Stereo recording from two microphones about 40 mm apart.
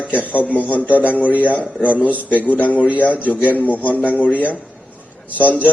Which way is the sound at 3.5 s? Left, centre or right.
Left.